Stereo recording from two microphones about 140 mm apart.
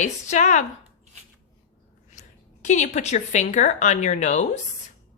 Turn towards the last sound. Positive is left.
turn(degrees=55)  # may be behind; listen again after turning